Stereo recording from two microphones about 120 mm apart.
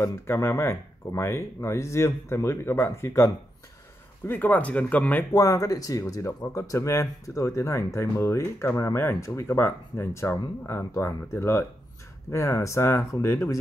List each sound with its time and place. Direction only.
0.0 s speech: 25° left (ahead or behind)
4.3 s speech: 15° left (ahead or behind)
5.3 s speech: 30° left (ahead or behind)